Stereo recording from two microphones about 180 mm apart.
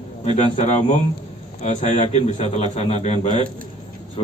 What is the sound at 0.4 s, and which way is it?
A man's voice, 35° left (ahead or behind).